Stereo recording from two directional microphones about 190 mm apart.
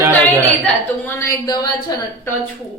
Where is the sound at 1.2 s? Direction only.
20° left (ahead or behind).